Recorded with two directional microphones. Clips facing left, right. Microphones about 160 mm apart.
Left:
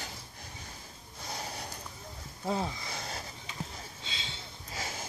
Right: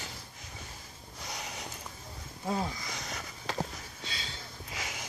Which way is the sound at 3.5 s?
90° right.